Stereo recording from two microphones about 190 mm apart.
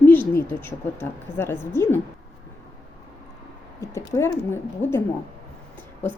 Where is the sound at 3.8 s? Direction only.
15° left (ahead or behind).